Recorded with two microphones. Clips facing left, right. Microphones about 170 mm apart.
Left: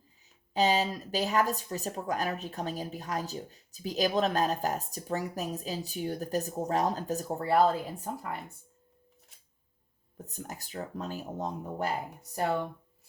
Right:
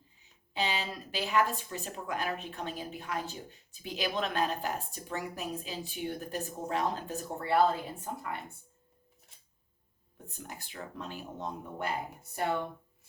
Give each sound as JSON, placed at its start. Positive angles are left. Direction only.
{"t": 0.5, "sound": "speech", "side_deg": 40}
{"t": 10.2, "sound": "speech", "side_deg": 40}